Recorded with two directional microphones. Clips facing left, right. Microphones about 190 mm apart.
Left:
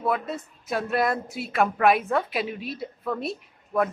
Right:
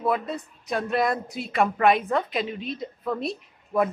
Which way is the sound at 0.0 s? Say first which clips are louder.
Right 1 dB; centre (ahead or behind).